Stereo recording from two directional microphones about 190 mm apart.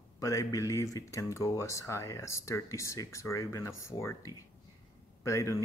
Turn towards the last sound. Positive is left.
turn(degrees=15)  # may be behind; listen again after turning